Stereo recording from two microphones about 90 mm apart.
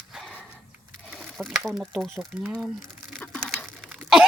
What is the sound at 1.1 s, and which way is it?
Speech, centre (ahead or behind).